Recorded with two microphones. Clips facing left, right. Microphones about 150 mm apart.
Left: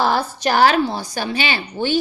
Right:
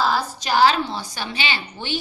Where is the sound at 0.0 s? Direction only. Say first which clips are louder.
Left 4 dB; 60° left (ahead or behind).